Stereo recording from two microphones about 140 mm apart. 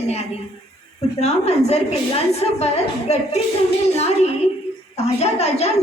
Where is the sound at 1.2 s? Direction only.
50° left (ahead or behind).